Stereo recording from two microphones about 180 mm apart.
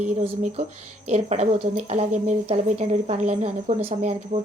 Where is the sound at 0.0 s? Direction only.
40° right (ahead or behind).